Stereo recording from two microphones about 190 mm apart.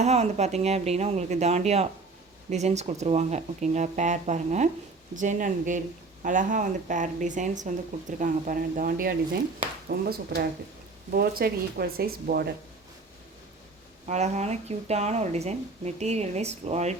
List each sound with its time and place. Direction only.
0.0 s speech: 35° right (ahead or behind); by 12.5 s 50° right (ahead or behind)
14.1 s speech: 35° right (ahead or behind)